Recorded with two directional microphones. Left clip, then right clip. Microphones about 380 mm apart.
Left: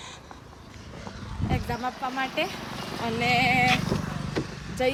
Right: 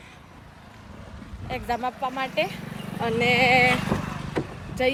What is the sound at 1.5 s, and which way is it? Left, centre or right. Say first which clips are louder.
Speech: right 5 dB; centre.